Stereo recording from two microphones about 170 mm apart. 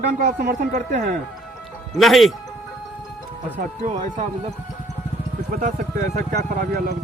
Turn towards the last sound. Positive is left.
turn(degrees=-55)  # may be behind; listen again after turning